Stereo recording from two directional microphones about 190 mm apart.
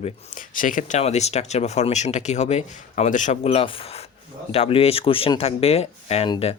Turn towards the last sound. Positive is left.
turn(degrees=30)  # may be behind; listen again after turning